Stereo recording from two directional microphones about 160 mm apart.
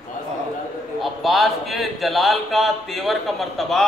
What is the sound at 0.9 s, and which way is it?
Speech, centre (ahead or behind).